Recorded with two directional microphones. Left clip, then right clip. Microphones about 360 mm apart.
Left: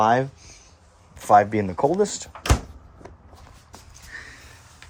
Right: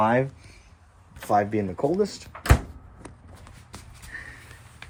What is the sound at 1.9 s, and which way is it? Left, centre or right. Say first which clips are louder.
Speech: left 3 dB; left.